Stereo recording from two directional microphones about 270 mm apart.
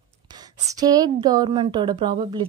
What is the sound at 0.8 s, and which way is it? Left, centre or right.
Speech, centre.